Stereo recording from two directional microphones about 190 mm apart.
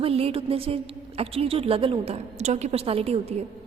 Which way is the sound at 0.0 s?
30° right (ahead or behind).